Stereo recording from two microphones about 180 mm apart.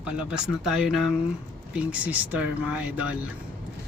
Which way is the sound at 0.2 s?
5° right (ahead or behind).